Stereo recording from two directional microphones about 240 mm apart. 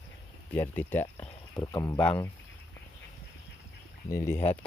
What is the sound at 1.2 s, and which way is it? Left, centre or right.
Speech, centre.